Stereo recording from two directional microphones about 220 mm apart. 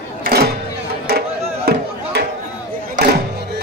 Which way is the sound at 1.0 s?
45° right (ahead or behind).